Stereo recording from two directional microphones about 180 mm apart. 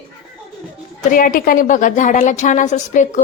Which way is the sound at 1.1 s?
50° left (ahead or behind).